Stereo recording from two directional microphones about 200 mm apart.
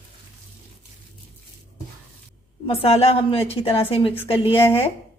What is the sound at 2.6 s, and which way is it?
A woman's voice, 30° left (ahead or behind).